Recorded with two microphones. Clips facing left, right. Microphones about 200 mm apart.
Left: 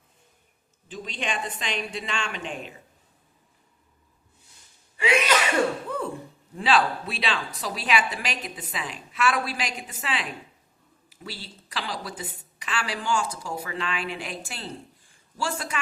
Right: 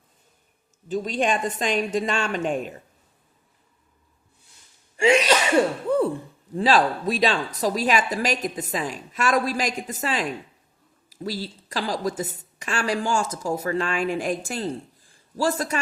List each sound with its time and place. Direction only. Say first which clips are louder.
0.9 s a woman's voice: right 9 dB; 40° right (ahead or behind)
5.9 s a sound: right 10 dB; 30° right (ahead or behind)
6.6 s a woman's voice: right 3 dB; 40° right (ahead or behind)